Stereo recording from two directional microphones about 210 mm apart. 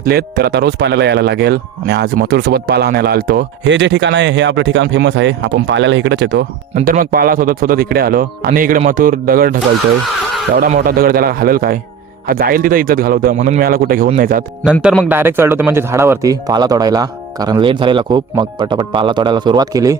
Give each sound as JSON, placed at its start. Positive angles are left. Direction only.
{"t": 0.0, "sound": "a man's voice", "side_deg": -45}
{"t": 6.7, "sound": "speech", "side_deg": -40}
{"t": 14.6, "sound": "speech", "side_deg": -5}